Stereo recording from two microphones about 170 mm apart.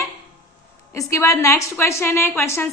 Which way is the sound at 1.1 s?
15° left (ahead or behind).